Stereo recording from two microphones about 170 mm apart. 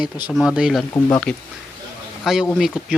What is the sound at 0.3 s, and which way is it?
Speech, 5° right (ahead or behind).